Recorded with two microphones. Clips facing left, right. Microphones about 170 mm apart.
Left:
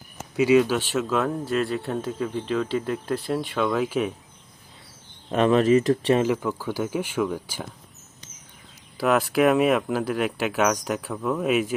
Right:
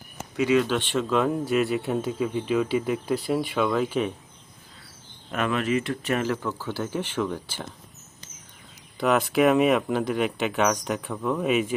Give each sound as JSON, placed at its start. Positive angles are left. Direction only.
{"t": 0.3, "sound": "speech", "side_deg": 10}
{"t": 5.3, "sound": "speech", "side_deg": 35}
{"t": 6.2, "sound": "speech", "side_deg": 15}
{"t": 9.0, "sound": "speech", "side_deg": 0}